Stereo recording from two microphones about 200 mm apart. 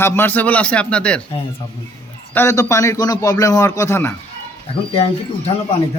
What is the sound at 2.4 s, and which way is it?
A man's voice, 15° left (ahead or behind).